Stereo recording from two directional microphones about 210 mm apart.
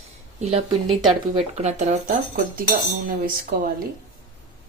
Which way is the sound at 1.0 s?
25° right (ahead or behind).